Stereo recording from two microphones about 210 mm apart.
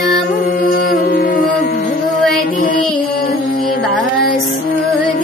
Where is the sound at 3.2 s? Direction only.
45° left (ahead or behind).